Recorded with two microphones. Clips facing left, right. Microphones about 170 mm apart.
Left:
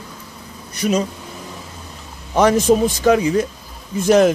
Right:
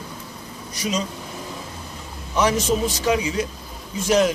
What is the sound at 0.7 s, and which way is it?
Bee, 60° left (ahead or behind).